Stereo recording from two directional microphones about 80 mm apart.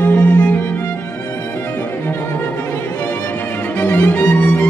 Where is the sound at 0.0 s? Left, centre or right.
Left.